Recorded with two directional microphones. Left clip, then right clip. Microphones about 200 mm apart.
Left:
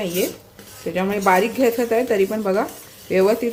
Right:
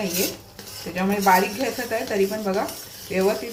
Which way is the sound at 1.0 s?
50° left (ahead or behind).